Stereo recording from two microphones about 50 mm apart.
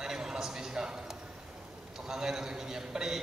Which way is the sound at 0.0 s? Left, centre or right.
Centre.